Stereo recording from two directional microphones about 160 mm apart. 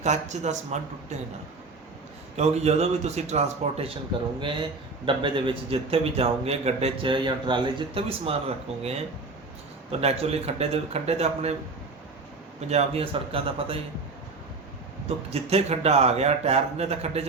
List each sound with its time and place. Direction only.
0.0 s speech: 45° right (ahead or behind)
2.3 s speech: 40° right (ahead or behind)
5.0 s a man's voice: 30° right (ahead or behind)
10.0 s a man's voice: 40° right (ahead or behind)
12.6 s a man's voice: 40° right (ahead or behind)
15.3 s a man's voice: 40° right (ahead or behind)